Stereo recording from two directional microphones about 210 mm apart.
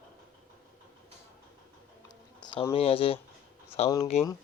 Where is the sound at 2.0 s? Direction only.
20° left (ahead or behind).